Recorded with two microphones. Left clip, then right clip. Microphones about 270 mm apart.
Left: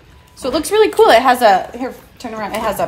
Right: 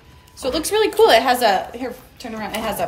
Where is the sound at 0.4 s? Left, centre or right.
Centre.